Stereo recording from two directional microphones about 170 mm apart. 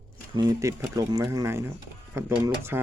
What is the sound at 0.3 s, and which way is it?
Speech, 20° right (ahead or behind).